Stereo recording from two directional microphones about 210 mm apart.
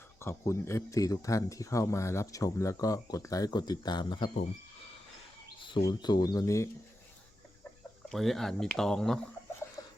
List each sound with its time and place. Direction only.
0.2 s speech: 10° left (ahead or behind)
5.5 s speech: 25° left (ahead or behind)
8.1 s speech: centre (ahead or behind)
9.8 s a sound: 15° left (ahead or behind)